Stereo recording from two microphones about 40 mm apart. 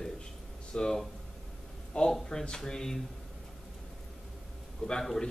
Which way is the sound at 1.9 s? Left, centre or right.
Centre.